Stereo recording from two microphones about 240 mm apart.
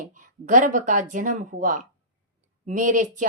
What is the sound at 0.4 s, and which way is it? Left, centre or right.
Speech, right.